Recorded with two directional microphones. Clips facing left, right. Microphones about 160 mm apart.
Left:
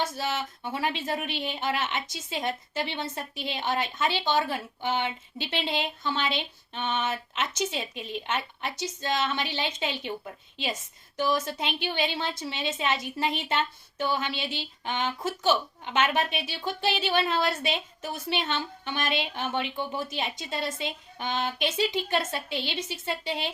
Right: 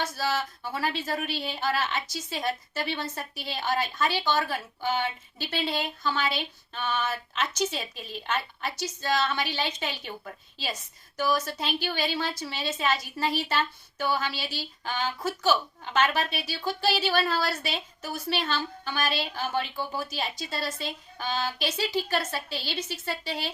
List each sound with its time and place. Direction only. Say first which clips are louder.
0.0 s a woman's voice: right 1 dB; 20° left (ahead or behind)
11.3 s a woman's voice: right 1 dB; 20° left (ahead or behind)